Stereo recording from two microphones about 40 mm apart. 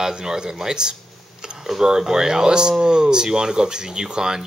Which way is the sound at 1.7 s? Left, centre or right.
Centre.